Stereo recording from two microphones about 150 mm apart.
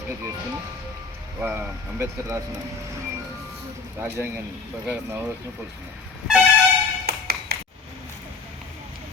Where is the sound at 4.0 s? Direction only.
15° right (ahead or behind).